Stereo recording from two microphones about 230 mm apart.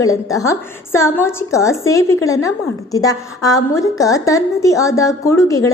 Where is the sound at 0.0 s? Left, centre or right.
Centre.